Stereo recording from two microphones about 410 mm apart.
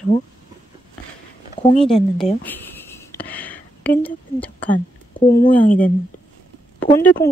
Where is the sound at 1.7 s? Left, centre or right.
Centre.